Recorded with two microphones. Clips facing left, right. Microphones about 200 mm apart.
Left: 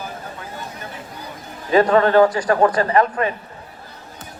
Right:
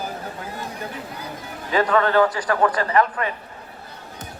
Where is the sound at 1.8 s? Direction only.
35° left (ahead or behind).